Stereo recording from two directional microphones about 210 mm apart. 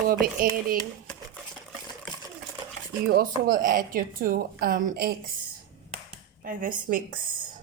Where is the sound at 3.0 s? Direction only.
45° right (ahead or behind).